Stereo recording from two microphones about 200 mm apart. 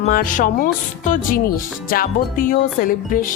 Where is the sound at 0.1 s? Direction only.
40° left (ahead or behind).